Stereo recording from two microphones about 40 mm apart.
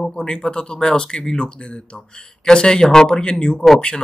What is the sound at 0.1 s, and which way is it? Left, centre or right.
Speech, left.